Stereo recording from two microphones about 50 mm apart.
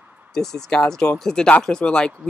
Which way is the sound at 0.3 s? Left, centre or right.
Centre.